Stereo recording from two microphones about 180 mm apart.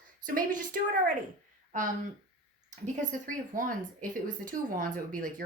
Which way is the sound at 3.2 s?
45° right (ahead or behind).